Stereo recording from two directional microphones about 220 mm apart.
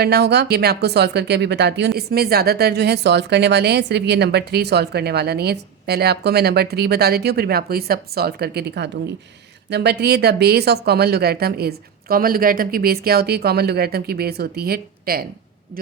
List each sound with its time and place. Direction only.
0.0 s speech: 45° right (ahead or behind)